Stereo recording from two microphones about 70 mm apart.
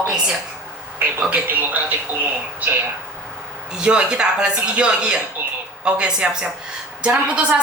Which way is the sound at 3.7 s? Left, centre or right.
Centre.